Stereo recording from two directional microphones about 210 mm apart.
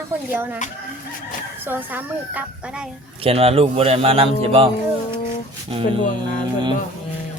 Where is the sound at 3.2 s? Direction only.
30° right (ahead or behind).